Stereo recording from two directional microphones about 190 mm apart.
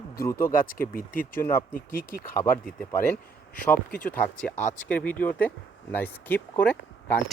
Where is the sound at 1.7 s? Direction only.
50° left (ahead or behind).